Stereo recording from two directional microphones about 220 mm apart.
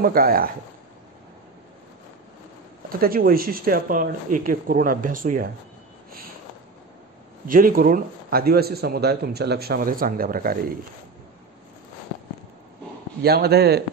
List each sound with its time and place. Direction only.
0.0 s a man's voice: 40° right (ahead or behind)
3.0 s a man's voice: 40° right (ahead or behind)
7.4 s a man's voice: 40° right (ahead or behind)
13.2 s a man's voice: 45° right (ahead or behind)